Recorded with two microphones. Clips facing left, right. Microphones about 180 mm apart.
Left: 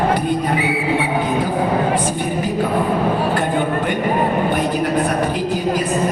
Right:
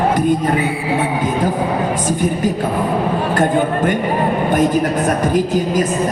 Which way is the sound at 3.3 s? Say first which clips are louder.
Right 3 dB; 45° right (ahead or behind).